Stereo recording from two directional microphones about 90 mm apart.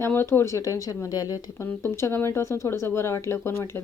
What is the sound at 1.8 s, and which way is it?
Speech, 30° left (ahead or behind).